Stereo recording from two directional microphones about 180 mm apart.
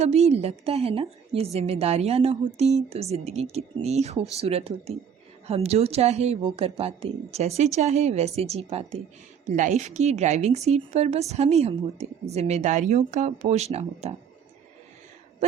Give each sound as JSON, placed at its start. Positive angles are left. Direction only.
{"t": 0.0, "sound": "a woman's voice", "side_deg": -35}